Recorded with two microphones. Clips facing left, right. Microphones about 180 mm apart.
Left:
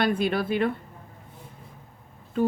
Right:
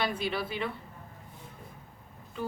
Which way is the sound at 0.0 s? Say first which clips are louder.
Left 7 dB; 55° left (ahead or behind).